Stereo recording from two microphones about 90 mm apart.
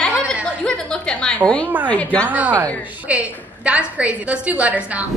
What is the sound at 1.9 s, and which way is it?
Speech, 15° left (ahead or behind).